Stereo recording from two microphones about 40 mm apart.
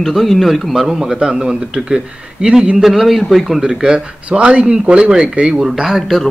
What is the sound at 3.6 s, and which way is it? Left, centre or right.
Speech, centre.